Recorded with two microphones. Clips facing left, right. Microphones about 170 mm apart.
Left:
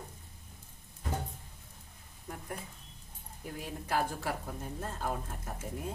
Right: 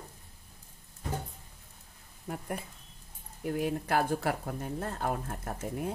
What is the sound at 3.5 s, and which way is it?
Speech, 65° right (ahead or behind).